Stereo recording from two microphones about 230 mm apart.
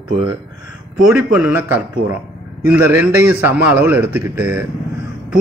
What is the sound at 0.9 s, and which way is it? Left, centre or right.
A man's voice, centre.